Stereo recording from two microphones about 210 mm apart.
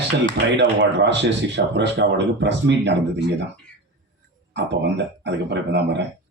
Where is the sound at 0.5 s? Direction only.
55° right (ahead or behind).